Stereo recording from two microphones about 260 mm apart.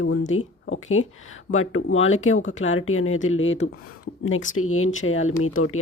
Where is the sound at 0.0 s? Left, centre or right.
Left.